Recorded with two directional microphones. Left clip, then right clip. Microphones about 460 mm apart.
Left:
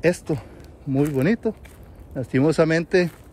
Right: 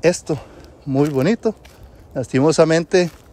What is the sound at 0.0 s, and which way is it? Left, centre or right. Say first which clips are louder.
Speech: right 4 dB; centre.